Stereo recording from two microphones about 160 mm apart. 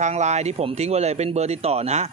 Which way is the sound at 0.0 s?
45° right (ahead or behind).